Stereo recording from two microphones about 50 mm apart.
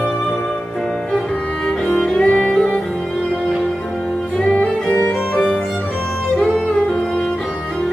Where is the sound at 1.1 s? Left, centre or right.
Centre.